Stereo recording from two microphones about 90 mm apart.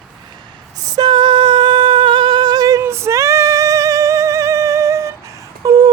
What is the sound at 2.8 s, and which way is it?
Singing, 30° right (ahead or behind).